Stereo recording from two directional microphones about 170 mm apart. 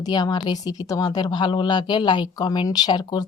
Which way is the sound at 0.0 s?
25° left (ahead or behind).